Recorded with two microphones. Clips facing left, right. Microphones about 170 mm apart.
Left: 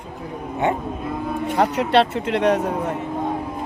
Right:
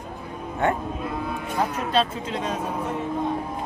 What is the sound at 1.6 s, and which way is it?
Speech, 75° left (ahead or behind).